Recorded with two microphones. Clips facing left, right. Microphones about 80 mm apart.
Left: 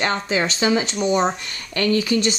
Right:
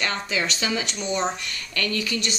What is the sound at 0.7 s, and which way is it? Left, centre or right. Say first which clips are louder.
Speech: left 8 dB; left.